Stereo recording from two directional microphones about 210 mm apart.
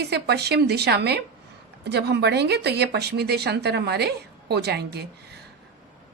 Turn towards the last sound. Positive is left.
turn(degrees=-50)  # may be behind; listen again after turning